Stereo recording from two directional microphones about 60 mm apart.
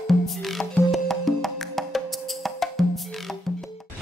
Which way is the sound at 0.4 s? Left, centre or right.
Centre.